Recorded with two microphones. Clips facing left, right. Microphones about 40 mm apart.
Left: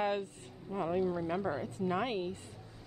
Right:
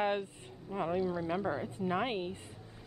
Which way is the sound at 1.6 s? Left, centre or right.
Centre.